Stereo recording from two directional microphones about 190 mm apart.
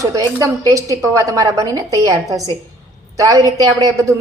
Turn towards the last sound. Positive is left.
turn(degrees=-20)  # may be behind; listen again after turning